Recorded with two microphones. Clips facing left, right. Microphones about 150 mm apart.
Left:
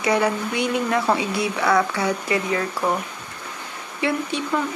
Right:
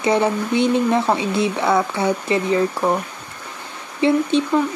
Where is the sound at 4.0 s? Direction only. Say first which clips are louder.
Right 7 dB; 25° right (ahead or behind).